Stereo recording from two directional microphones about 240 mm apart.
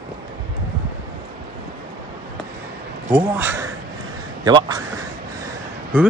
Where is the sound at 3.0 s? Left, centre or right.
Centre.